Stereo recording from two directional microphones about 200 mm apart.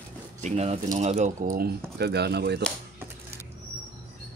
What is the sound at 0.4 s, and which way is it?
Speech, 35° right (ahead or behind).